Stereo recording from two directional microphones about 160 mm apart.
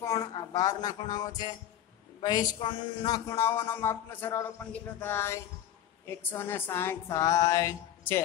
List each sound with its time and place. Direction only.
0.0 s speech: 20° left (ahead or behind)